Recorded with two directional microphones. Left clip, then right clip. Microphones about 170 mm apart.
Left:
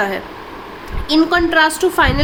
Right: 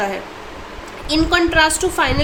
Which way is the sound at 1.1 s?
30° left (ahead or behind).